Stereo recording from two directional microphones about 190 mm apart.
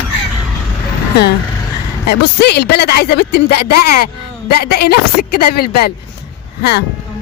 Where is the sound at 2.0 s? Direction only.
60° left (ahead or behind).